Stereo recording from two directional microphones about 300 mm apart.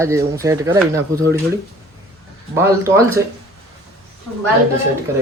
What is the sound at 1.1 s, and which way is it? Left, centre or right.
Speech, right.